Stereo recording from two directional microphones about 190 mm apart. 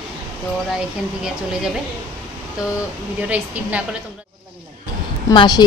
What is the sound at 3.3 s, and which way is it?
Speech, 5° right (ahead or behind).